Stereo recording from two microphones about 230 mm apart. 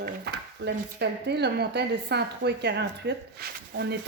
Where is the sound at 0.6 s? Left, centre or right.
Right.